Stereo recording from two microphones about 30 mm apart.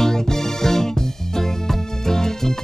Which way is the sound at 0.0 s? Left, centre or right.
Centre.